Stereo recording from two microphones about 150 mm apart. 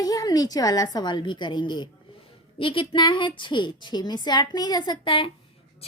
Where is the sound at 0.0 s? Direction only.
25° left (ahead or behind).